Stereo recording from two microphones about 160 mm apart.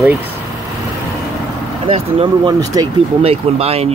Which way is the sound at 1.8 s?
35° right (ahead or behind).